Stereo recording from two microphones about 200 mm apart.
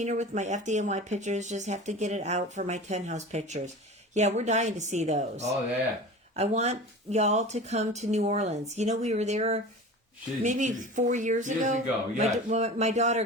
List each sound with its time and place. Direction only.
0.0 s speech: 35° right (ahead or behind)